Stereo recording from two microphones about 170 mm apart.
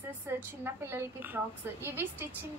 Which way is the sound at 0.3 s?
15° right (ahead or behind).